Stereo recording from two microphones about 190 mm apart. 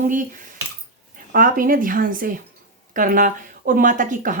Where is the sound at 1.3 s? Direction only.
50° right (ahead or behind).